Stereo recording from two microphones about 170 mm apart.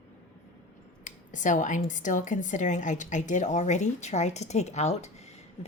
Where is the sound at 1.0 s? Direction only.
45° left (ahead or behind).